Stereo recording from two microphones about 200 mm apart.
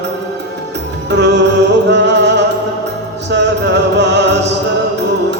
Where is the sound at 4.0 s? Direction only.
60° right (ahead or behind).